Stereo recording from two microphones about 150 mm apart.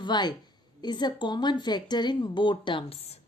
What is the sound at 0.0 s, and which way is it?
A woman's voice, 30° left (ahead or behind).